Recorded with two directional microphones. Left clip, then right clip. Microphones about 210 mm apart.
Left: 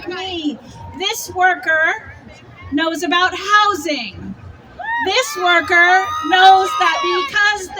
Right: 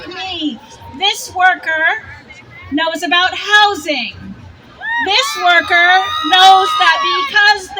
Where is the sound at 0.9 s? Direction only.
55° left (ahead or behind).